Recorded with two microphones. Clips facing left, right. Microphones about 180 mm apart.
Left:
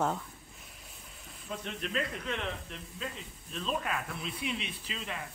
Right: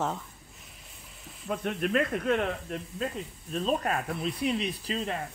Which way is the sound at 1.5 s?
55° right (ahead or behind).